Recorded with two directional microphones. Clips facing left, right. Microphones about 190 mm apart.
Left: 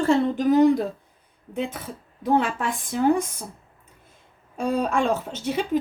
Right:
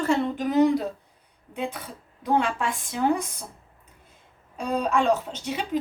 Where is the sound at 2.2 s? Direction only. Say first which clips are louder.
Left 2 dB; 45° left (ahead or behind).